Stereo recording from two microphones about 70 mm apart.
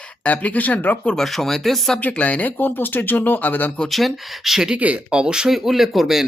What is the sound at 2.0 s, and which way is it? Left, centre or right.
Speech, left.